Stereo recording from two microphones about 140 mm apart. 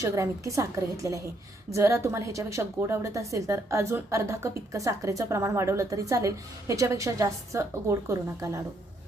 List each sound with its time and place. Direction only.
0.0 s a woman's voice: 20° right (ahead or behind)